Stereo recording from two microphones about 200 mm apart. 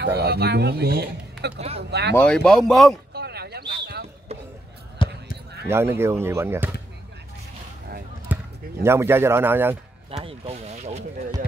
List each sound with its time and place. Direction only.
0.0 s speech: 55° right (ahead or behind)
2.1 s a man's voice: 5° left (ahead or behind)
3.1 s a sound: 55° right (ahead or behind)
4.3 s a sound: 30° right (ahead or behind)
5.0 s basketball bounce: 25° left (ahead or behind)
5.7 s speech: 10° right (ahead or behind)
8.3 s basketball bounce: 10° right (ahead or behind)
8.8 s a man's voice: 10° right (ahead or behind)
10.2 s speech: 30° right (ahead or behind)